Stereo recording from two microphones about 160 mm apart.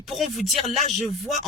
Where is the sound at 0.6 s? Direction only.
45° right (ahead or behind).